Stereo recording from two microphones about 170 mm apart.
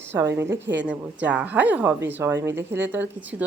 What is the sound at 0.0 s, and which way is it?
Speech, 15° right (ahead or behind).